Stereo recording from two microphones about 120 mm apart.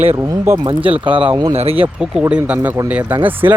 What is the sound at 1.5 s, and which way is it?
Speech, 60° right (ahead or behind).